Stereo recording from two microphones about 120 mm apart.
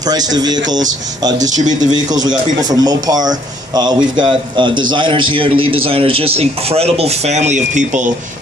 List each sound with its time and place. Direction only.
0.0 s speech: 35° right (ahead or behind)
1.5 s speech: 90° right
1.9 s a man's voice: 35° right (ahead or behind); by 8.1 s 90° right